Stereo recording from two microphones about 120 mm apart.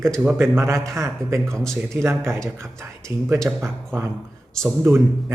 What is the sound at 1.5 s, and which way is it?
Speech, 5° left (ahead or behind).